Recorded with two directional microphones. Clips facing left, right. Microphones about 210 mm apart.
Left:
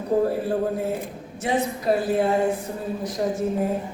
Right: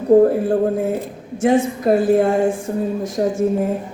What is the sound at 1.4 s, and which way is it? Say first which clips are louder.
A man's voice: right 8 dB; 50° right (ahead or behind).